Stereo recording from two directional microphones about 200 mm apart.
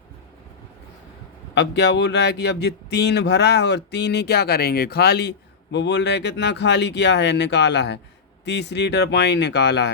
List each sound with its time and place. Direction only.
1.5 s speech: 60° left (ahead or behind)